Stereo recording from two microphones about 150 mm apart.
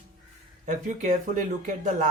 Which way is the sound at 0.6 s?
55° right (ahead or behind).